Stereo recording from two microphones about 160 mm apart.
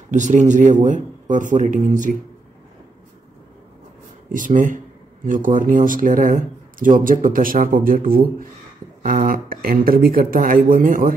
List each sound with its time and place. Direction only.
0.1 s a man's voice: 50° right (ahead or behind)
4.3 s speech: 55° right (ahead or behind)